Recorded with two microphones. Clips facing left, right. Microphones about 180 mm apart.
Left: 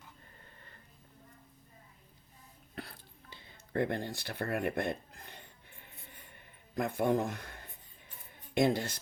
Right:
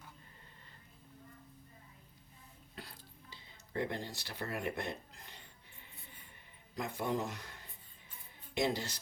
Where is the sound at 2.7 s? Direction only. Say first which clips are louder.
Left 6 dB; 55° left (ahead or behind).